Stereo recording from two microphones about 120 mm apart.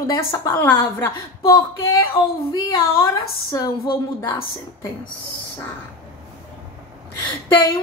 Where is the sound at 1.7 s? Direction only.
30° left (ahead or behind).